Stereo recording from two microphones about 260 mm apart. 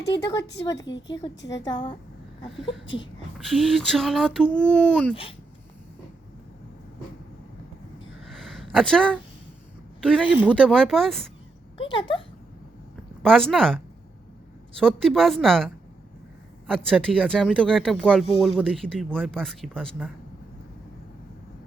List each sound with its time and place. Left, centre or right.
0.6 s a woman's voice: centre
0.9 s speech: left
1.6 s a woman's voice: centre
2.8 s speech: left
3.3 s speech: centre
8.2 s a sound: centre
10.0 s speech: centre
11.8 s speech: centre
13.2 s speech: centre
14.8 s speech: centre